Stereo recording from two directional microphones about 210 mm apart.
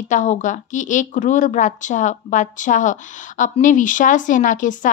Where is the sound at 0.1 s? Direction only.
35° left (ahead or behind).